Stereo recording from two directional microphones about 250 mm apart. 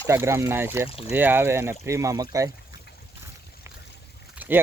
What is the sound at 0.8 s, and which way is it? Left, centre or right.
Speech, left.